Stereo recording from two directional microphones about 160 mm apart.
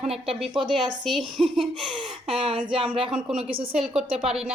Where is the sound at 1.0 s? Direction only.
Centre (ahead or behind).